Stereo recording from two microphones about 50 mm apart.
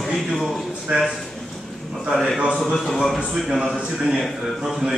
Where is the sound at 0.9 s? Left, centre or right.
Right.